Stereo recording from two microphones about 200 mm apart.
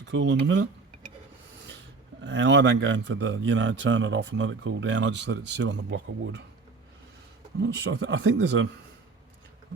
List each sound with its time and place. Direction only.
0.0 s speech: 65° right (ahead or behind)
2.2 s speech: 60° right (ahead or behind)
7.6 s speech: 65° right (ahead or behind)